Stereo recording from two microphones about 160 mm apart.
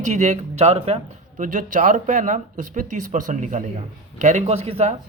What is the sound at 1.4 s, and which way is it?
A man's voice, 55° right (ahead or behind).